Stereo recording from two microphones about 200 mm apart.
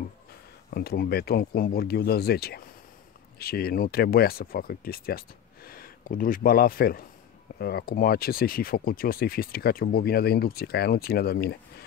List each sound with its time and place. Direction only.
0.7 s speech: 50° left (ahead or behind)